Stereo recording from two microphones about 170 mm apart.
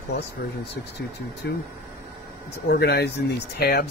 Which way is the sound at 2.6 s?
75° left (ahead or behind).